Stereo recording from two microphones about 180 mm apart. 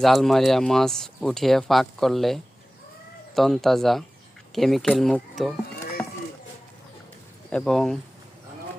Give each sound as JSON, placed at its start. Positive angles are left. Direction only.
{"t": 0.0, "sound": "speech", "side_deg": 0}
{"t": 6.0, "sound": "a sound", "side_deg": 20}
{"t": 7.5, "sound": "speech", "side_deg": 0}